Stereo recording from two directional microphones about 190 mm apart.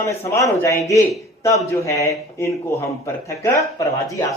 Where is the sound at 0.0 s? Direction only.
15° left (ahead or behind).